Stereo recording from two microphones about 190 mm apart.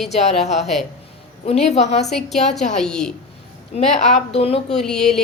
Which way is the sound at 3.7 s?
35° left (ahead or behind).